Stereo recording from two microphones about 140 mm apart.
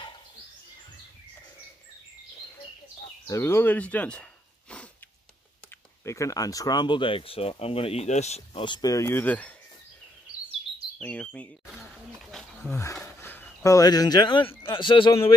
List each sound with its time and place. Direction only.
3.3 s speech: 20° left (ahead or behind)
6.0 s speech: 20° left (ahead or behind); by 8.6 s 50° left (ahead or behind)
8.6 s speech: 30° left (ahead or behind); by 9.5 s 10° left (ahead or behind)
11.0 s speech: 10° left (ahead or behind)
12.3 s wild animals: 5° left (ahead or behind)
13.0 s a sound: 15° left (ahead or behind); by 14.5 s 35° left (ahead or behind)
14.6 s speech: 35° left (ahead or behind)